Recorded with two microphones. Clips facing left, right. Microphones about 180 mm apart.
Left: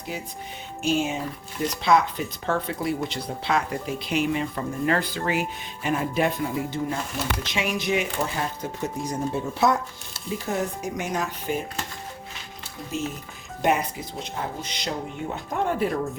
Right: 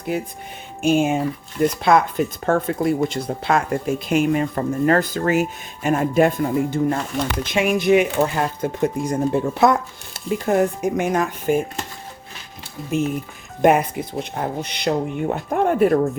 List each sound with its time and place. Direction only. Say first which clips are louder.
0.1 s speech: right 8 dB; 55° right (ahead or behind)
12.9 s speech: right 9 dB; 55° right (ahead or behind)